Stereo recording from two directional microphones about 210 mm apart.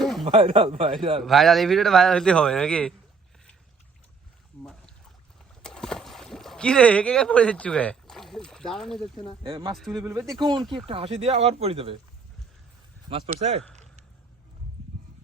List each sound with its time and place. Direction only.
0.0 s a sound: centre (ahead or behind)
0.3 s speech: 25° right (ahead or behind)
1.2 s a man's voice: centre (ahead or behind)
4.6 s a sound: 5° left (ahead or behind)
5.6 s boat: 5° left (ahead or behind)
9.4 s speech: 25° right (ahead or behind)
9.7 s a man's voice: centre (ahead or behind)
10.3 s speech: 20° right (ahead or behind)
10.6 s a man's voice: centre (ahead or behind)
10.8 s speech: 25° right (ahead or behind)
13.1 s speech: 30° right (ahead or behind)